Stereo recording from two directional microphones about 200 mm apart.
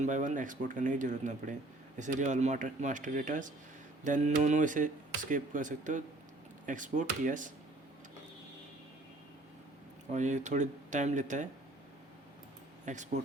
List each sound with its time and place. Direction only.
0.0 s speech: 40° right (ahead or behind)
10.1 s speech: 35° right (ahead or behind)
12.8 s speech: 35° right (ahead or behind)